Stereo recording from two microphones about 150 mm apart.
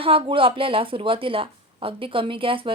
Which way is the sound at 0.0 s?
35° right (ahead or behind).